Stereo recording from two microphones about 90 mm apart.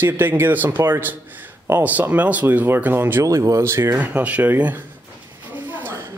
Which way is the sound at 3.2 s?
40° right (ahead or behind).